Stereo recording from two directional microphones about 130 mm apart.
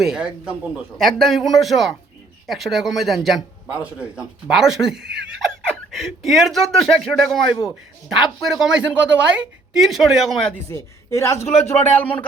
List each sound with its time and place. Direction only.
0.0 s a woman's voice: 5° right (ahead or behind)
10.5 s speech: 20° left (ahead or behind)
11.4 s a man's voice: 55° left (ahead or behind)